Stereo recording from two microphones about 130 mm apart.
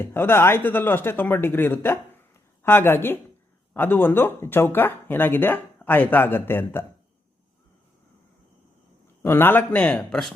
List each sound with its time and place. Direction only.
0.0 s speech: 15° left (ahead or behind)
9.2 s speech: 15° left (ahead or behind)